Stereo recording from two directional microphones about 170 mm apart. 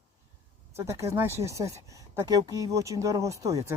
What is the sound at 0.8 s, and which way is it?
Speech, 15° right (ahead or behind).